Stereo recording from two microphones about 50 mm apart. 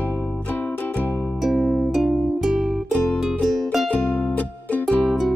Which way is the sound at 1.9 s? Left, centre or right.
Centre.